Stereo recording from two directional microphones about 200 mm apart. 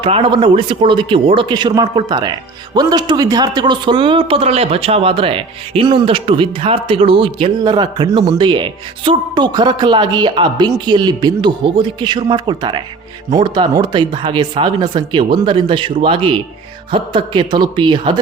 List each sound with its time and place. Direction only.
0.0 s speech: 25° right (ahead or behind)